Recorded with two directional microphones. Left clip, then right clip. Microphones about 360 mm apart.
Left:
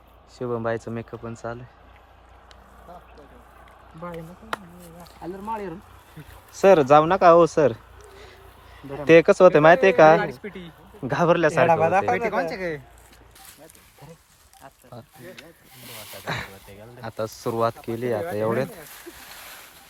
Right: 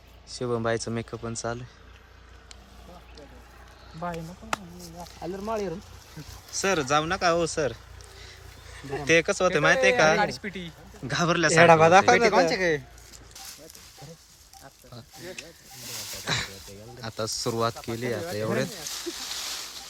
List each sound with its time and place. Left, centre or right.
0.3 s speech: centre
4.0 s speech: centre
6.5 s speech: centre
9.0 s speech: centre
10.4 s speech: centre
11.1 s speech: centre
11.6 s speech: right
16.2 s a sound: centre
17.0 s speech: centre
19.0 s a sound: right